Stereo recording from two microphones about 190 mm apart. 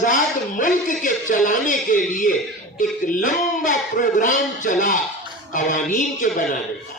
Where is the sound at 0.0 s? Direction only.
45° left (ahead or behind).